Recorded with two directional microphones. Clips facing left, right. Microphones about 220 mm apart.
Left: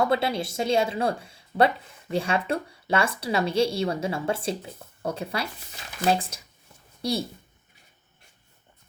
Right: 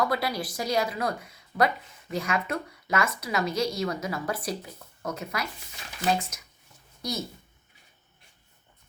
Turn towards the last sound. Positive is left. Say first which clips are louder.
# left 5 dB
turn(degrees=30)  # may be behind; listen again after turning